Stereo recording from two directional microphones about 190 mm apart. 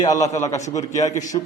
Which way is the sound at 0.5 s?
35° left (ahead or behind).